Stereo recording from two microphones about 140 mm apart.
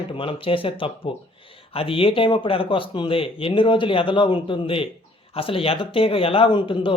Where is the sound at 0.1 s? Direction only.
40° left (ahead or behind).